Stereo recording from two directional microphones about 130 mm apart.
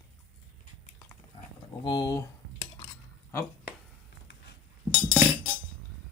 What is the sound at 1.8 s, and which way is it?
Speech, 30° left (ahead or behind).